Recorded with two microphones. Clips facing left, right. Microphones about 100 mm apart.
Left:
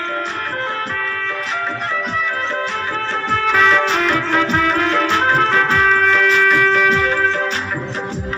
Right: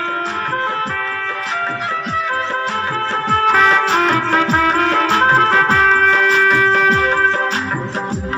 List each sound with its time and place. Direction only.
3.2 s music: 40° right (ahead or behind)